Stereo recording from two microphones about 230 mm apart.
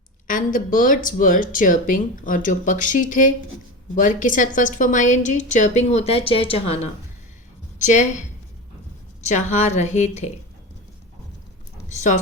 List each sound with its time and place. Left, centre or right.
0.3 s speech: left
7.8 s a woman's voice: left
9.2 s speech: left
11.9 s a woman's voice: left